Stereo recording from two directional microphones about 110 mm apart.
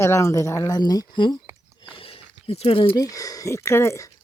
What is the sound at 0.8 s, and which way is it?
Speech, 35° left (ahead or behind).